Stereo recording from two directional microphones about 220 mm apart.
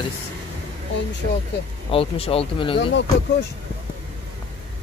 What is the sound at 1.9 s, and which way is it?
Speech, 25° left (ahead or behind).